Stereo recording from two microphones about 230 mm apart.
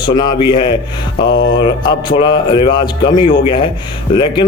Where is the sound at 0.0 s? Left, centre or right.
Centre.